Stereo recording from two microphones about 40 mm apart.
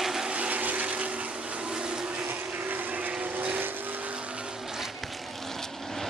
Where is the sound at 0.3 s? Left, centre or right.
Right.